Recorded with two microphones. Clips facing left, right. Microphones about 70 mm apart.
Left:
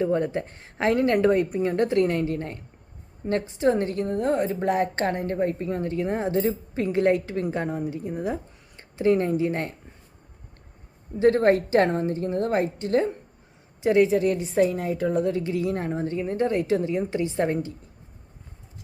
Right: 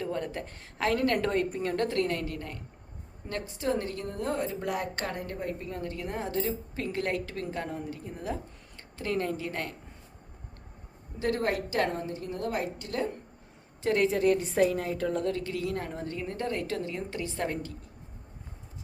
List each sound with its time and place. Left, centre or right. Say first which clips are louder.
0.0 s a woman's voice: left 9 dB; left
11.2 s a woman's voice: left 10 dB; left
13.8 s a woman's voice: left 5 dB; centre; by 17.7 s left